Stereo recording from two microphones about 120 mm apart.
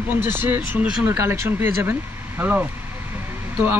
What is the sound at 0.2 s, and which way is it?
A man's voice, 15° right (ahead or behind).